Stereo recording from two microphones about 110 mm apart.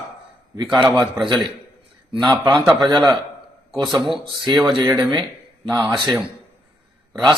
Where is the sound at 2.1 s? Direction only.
45° right (ahead or behind).